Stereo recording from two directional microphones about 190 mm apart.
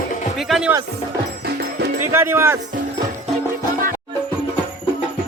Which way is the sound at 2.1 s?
10° right (ahead or behind).